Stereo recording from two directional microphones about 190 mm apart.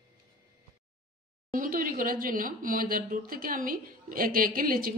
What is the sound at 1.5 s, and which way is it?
Speech, 45° right (ahead or behind).